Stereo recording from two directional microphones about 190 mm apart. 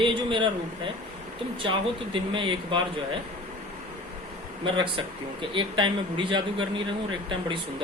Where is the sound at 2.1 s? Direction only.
25° right (ahead or behind).